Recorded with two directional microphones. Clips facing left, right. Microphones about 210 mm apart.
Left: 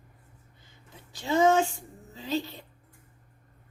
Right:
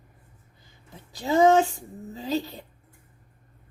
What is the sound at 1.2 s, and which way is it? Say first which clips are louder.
Speech: right 4 dB; 40° right (ahead or behind).